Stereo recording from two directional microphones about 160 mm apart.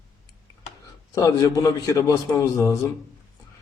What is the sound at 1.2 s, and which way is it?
A man's voice, 20° left (ahead or behind).